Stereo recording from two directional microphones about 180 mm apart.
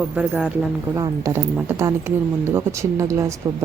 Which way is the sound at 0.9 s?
20° right (ahead or behind).